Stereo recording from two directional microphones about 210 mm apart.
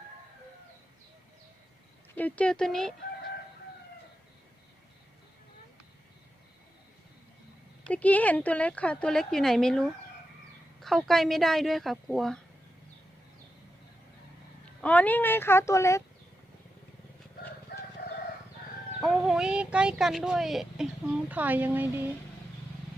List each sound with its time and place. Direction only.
2.1 s speech: 5° left (ahead or behind)
7.9 s speech: 5° left (ahead or behind)
14.6 s speech: 5° left (ahead or behind)
17.7 s crowing: 50° left (ahead or behind)
18.9 s speech: centre (ahead or behind)